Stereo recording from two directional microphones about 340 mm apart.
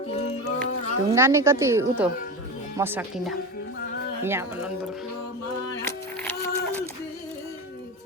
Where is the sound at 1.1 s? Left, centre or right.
Centre.